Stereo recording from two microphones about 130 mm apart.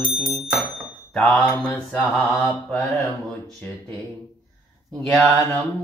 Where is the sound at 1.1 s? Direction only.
10° left (ahead or behind).